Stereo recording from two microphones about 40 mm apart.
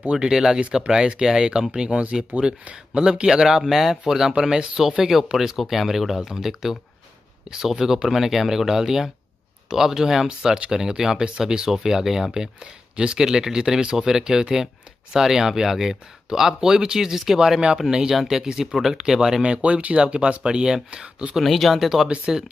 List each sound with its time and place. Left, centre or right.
0.1 s speech: right
3.3 s speech: centre
4.3 s speech: right
5.0 s speech: centre
13.2 s speech: centre
18.1 s speech: centre
19.4 s speech: right
20.4 s speech: centre
21.4 s speech: centre
22.0 s speech: right